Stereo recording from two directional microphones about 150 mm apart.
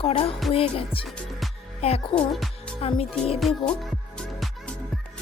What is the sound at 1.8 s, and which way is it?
Music, 40° left (ahead or behind).